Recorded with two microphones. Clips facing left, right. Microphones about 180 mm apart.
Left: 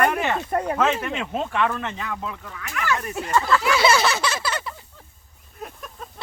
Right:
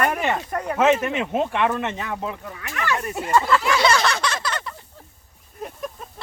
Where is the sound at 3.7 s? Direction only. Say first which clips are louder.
Even; 5° left (ahead or behind).